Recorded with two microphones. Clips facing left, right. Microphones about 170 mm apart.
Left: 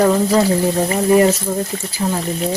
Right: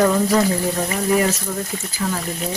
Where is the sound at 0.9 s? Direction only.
35° left (ahead or behind).